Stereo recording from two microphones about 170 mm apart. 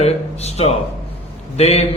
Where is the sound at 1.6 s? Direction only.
40° left (ahead or behind).